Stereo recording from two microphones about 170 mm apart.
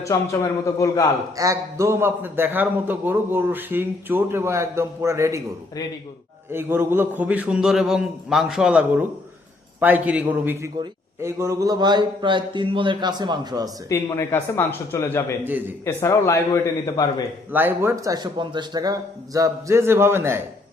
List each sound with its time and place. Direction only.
0.0 s speech: 20° left (ahead or behind)
1.4 s a man's voice: 20° right (ahead or behind)
6.5 s a man's voice: 15° right (ahead or behind)
13.9 s speech: 15° left (ahead or behind)
15.4 s a man's voice: 10° right (ahead or behind)
15.8 s a man's voice: 15° left (ahead or behind)
17.5 s a man's voice: 10° right (ahead or behind)